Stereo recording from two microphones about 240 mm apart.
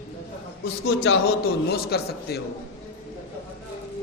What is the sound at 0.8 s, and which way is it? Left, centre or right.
Speech, left.